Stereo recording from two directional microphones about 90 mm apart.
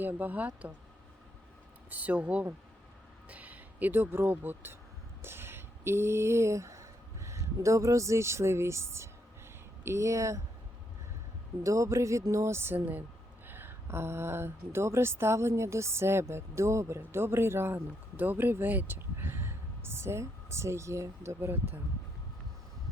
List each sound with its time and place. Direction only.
0.0 s speech: 20° right (ahead or behind)
1.9 s speech: 15° right (ahead or behind)
5.2 s a sound: 25° right (ahead or behind)
9.8 s speech: 30° right (ahead or behind)
11.6 s speech: 35° right (ahead or behind)